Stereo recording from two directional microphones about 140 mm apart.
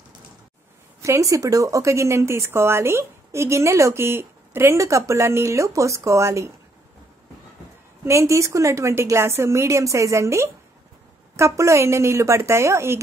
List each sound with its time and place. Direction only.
1.0 s speech: 20° right (ahead or behind)
8.0 s speech: 20° right (ahead or behind)